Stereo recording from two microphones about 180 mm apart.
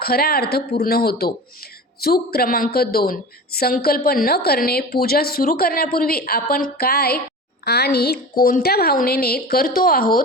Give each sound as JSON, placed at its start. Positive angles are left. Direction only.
{"t": 0.0, "sound": "a woman's voice", "side_deg": 60}